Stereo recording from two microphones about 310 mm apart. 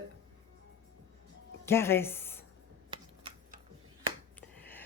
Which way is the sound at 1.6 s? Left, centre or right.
Centre.